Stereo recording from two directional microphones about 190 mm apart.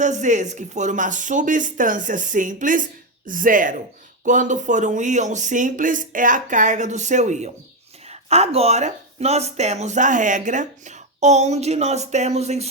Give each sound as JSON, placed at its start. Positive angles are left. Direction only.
{"t": 0.0, "sound": "speech", "side_deg": -40}